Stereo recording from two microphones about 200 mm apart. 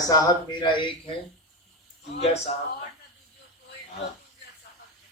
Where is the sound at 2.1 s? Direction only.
35° left (ahead or behind).